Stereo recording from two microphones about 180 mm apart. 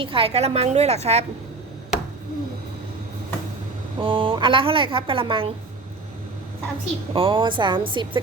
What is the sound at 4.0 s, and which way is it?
A woman's voice, 30° right (ahead or behind).